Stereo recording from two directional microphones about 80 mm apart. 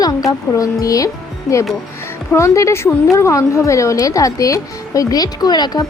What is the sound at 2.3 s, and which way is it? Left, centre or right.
A woman's voice, left.